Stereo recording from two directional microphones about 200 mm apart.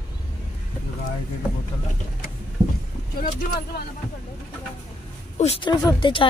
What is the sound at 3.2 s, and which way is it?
Speech, 45° left (ahead or behind).